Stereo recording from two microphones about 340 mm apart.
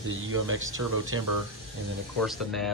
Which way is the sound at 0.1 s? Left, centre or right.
Right.